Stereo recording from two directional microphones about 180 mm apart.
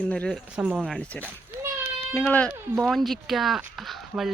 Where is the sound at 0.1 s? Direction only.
5° left (ahead or behind).